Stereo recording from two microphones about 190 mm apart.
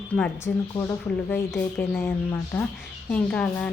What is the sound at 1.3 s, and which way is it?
A woman's voice, 10° left (ahead or behind).